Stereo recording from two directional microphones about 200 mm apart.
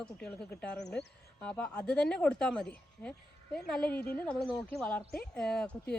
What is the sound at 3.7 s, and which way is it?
Speech, 5° left (ahead or behind).